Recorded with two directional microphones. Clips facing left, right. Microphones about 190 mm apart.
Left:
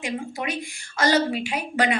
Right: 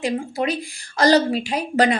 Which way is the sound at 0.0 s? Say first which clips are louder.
Right 6 dB; 35° right (ahead or behind).